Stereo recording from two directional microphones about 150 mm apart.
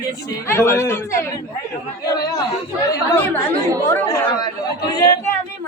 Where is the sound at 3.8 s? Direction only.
20° left (ahead or behind).